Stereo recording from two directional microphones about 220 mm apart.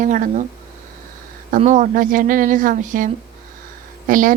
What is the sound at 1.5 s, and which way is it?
A woman's voice, 30° right (ahead or behind).